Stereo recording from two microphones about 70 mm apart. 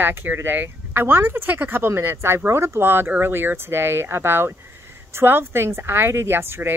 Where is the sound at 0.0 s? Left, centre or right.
Right.